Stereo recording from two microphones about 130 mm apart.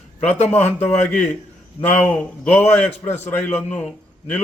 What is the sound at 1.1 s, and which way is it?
A man's voice, 10° left (ahead or behind).